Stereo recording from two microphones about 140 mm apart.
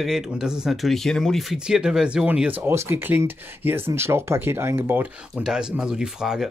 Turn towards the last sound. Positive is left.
turn(degrees=-5)  # may be behind; listen again after turning